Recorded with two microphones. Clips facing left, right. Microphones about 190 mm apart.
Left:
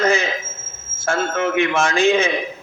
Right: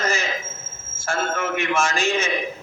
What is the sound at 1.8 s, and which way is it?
Speech, 60° left (ahead or behind).